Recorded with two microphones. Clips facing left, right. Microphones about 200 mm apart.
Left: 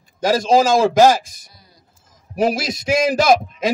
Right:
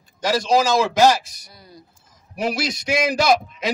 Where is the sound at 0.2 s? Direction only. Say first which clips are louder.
Left 4 dB; 50° left (ahead or behind).